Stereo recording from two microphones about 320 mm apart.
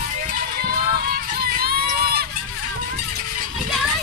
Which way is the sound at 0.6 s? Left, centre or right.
Right.